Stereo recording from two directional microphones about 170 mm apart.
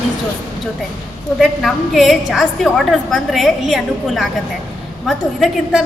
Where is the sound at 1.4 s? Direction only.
Centre (ahead or behind).